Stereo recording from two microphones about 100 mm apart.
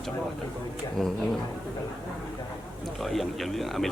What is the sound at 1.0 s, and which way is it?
Speech, 5° left (ahead or behind).